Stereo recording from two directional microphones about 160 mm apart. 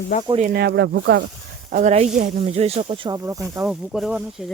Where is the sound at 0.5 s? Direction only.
85° right.